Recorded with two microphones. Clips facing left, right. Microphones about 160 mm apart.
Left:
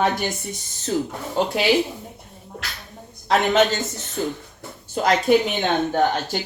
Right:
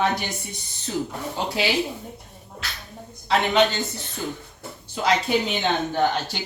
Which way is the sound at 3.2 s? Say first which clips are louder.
Left 2 dB; 45° left (ahead or behind).